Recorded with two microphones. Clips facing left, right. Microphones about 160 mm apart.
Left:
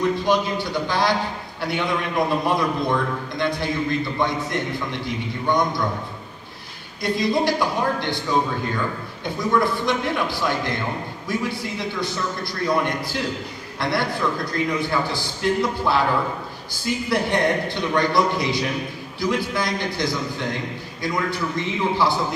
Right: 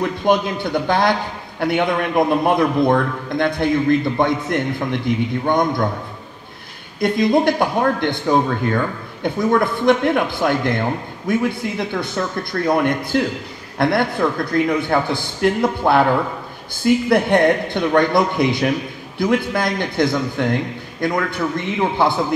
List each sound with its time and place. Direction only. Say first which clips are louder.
0.2 s speech: right 4 dB; 55° right (ahead or behind)
7.0 s a man's voice: right 5 dB; 55° right (ahead or behind)